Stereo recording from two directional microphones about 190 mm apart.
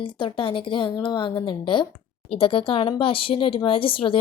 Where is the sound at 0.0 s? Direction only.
25° left (ahead or behind).